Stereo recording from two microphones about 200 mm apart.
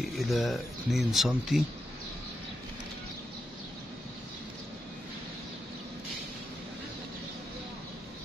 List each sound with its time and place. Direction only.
0.0 s speech: centre (ahead or behind)